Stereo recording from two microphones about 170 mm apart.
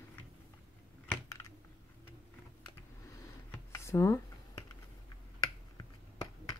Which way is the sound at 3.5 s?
15° left (ahead or behind).